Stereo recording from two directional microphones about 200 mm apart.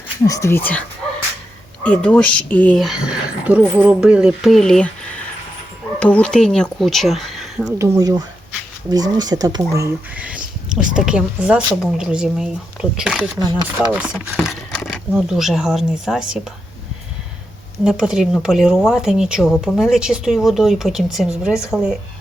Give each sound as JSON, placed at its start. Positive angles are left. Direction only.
{"t": 0.3, "sound": "speech", "side_deg": 15}
{"t": 6.0, "sound": "speech", "side_deg": 5}
{"t": 7.8, "sound": "speech", "side_deg": -15}
{"t": 13.4, "sound": "speech", "side_deg": -20}
{"t": 13.9, "sound": "speech", "side_deg": -5}
{"t": 17.8, "sound": "speech", "side_deg": -5}